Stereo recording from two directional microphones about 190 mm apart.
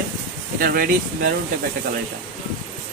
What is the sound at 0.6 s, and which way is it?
Speech, 50° right (ahead or behind).